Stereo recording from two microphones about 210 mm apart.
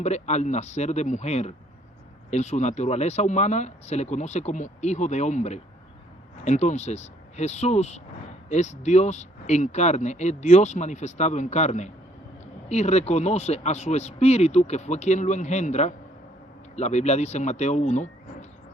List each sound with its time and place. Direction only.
0.0 s speech: 30° left (ahead or behind)